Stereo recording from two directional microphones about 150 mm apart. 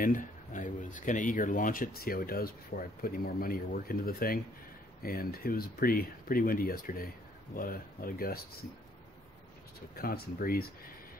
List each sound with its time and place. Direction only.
0.0 s speech: 60° left (ahead or behind); by 8.4 s 80° left
9.9 s speech: 85° left